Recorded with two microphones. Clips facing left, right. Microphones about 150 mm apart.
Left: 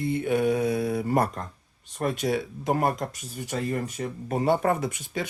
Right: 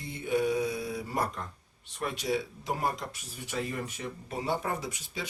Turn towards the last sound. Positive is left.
turn(degrees=55)  # may be behind; listen again after turning